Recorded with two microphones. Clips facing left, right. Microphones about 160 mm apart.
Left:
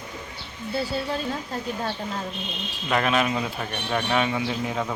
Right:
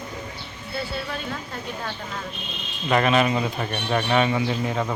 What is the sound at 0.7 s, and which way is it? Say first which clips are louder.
Speech: left 3 dB; 35° left (ahead or behind).